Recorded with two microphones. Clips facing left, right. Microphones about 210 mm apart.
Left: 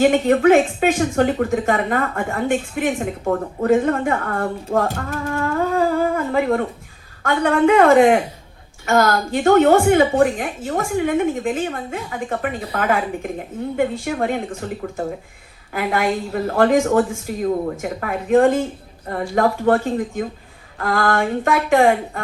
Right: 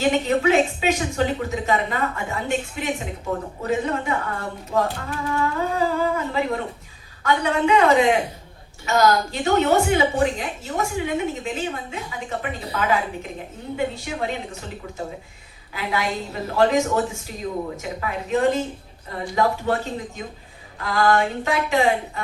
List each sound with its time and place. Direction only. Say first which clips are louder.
0.0 s speech: left 6 dB; 55° left (ahead or behind)
15.7 s speech: left 6 dB; 50° left (ahead or behind)